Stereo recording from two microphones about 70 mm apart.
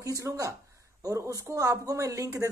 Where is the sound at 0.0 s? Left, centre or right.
Right.